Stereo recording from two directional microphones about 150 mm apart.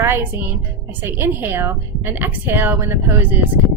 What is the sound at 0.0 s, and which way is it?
Music, 15° right (ahead or behind).